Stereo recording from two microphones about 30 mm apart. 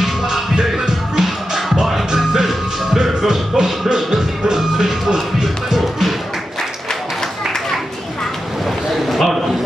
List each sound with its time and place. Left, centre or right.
0.6 s music: centre
1.9 s music: centre
9.0 s a sound: centre